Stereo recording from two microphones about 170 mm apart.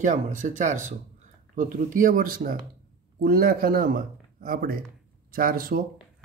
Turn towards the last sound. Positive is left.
turn(degrees=-60)  # may be behind; listen again after turning